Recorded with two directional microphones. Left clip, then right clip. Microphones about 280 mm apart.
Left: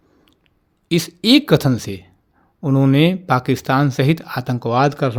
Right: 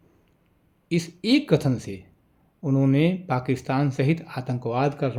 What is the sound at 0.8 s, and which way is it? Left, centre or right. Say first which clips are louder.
Speech: left 9 dB; left.